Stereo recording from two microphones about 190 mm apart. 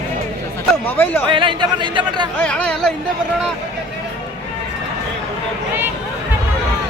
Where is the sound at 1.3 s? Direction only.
25° right (ahead or behind).